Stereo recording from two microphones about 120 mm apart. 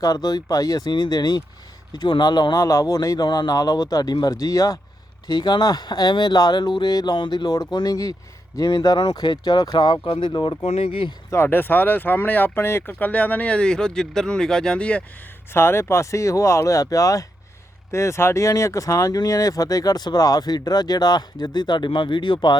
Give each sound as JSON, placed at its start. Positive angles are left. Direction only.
{"t": 0.0, "sound": "speech", "side_deg": 30}
{"t": 10.6, "sound": "speech", "side_deg": 55}
{"t": 11.3, "sound": "speech", "side_deg": 20}
{"t": 15.5, "sound": "speech", "side_deg": 20}